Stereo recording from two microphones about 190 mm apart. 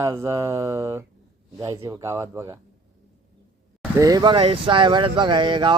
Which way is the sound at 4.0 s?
20° right (ahead or behind).